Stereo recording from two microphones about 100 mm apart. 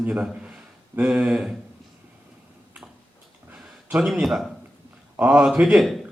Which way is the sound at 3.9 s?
10° right (ahead or behind).